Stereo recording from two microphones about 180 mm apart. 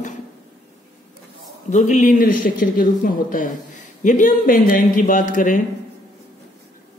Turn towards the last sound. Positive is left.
turn(degrees=45)  # may be behind; listen again after turning